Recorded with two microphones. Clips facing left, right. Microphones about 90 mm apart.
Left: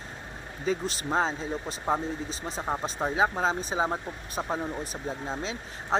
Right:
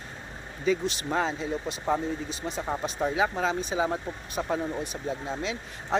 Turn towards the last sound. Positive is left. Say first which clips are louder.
# even
turn(degrees=35)  # may be behind; listen again after turning